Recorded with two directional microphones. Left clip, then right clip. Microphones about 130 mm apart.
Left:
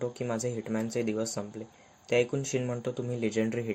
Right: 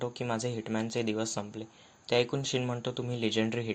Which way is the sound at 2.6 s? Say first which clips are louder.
Left 1 dB; 35° right (ahead or behind).